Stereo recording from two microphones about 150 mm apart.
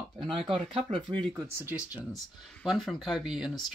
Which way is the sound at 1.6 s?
10° right (ahead or behind).